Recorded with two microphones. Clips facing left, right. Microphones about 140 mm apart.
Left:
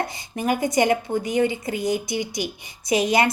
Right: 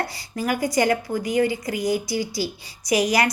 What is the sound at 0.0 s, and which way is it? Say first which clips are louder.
A woman's voice: left 1 dB; 20° left (ahead or behind).